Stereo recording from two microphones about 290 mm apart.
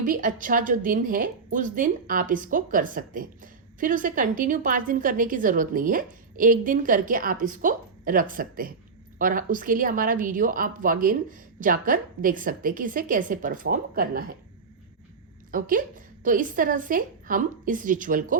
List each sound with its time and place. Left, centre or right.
0.0 s speech: right
15.5 s speech: right